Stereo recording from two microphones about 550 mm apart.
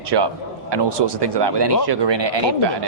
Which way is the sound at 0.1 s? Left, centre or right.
Right.